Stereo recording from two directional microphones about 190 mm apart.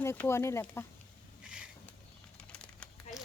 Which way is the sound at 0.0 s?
15° left (ahead or behind).